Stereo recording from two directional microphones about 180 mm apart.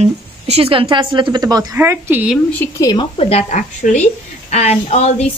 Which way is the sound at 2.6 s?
20° left (ahead or behind).